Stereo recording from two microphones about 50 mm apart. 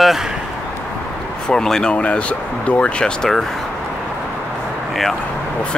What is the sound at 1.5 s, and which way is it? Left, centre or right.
Speech, centre.